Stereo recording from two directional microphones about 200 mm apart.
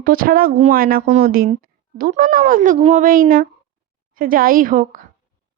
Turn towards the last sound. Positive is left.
turn(degrees=-40)  # may be behind; listen again after turning